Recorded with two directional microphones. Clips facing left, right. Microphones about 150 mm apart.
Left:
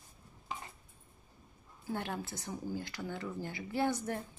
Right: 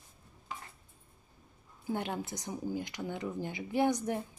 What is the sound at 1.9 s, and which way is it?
Speech, 20° right (ahead or behind).